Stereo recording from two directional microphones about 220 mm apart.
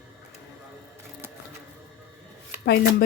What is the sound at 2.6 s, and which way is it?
Speech, 45° left (ahead or behind).